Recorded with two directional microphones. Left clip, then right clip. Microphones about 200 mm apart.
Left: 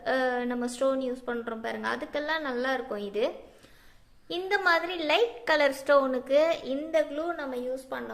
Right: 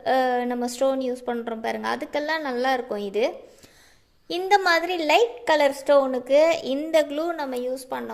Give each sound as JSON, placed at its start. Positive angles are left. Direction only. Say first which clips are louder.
{"t": 0.0, "sound": "a woman's voice", "louder": "right 6 dB", "side_deg": -25}